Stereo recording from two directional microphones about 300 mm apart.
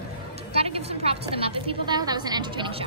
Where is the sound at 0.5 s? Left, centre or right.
Centre.